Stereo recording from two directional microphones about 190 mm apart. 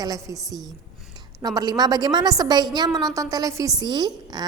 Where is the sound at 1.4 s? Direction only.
20° right (ahead or behind).